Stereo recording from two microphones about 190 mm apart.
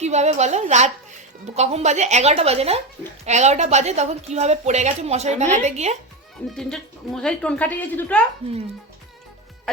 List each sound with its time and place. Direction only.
0.0 s a woman's voice: 35° right (ahead or behind)
6.6 s speech: 5° left (ahead or behind)